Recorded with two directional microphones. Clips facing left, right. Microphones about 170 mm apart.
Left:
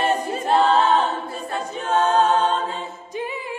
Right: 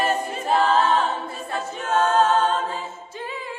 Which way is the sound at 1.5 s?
35° left (ahead or behind).